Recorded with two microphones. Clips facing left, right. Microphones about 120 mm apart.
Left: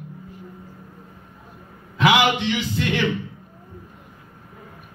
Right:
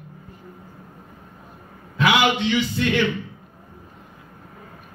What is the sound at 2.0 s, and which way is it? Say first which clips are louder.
Speech: left 1 dB; 15° left (ahead or behind).